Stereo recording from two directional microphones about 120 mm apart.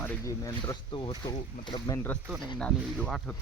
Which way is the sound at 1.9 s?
15° left (ahead or behind).